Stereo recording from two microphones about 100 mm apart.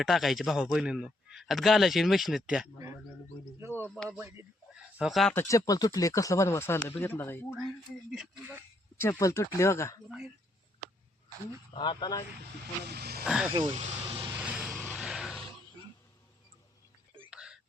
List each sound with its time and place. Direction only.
0.0 s a man's voice: centre (ahead or behind)
3.6 s a sound: 25° right (ahead or behind)
4.2 s speech: 25° right (ahead or behind)
4.7 s a sound: 5° right (ahead or behind)
5.3 s speech: 25° left (ahead or behind)
9.0 s speech: 30° left (ahead or behind)
11.8 s speech: 50° left (ahead or behind)
13.2 s a man's voice: 5° right (ahead or behind)
13.5 s speech: 55° right (ahead or behind)
14.3 s vehicle: 15° right (ahead or behind)
14.9 s music: 5° right (ahead or behind)
17.3 s a sound: 5° right (ahead or behind)